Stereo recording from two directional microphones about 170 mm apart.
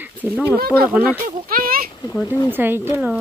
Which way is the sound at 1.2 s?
60° right (ahead or behind).